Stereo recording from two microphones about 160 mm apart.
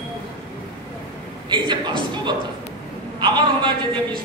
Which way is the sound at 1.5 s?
30° right (ahead or behind).